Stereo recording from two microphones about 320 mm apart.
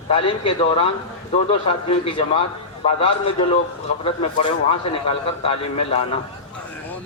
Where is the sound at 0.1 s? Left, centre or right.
Centre.